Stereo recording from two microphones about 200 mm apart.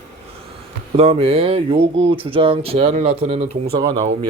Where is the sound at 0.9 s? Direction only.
30° right (ahead or behind).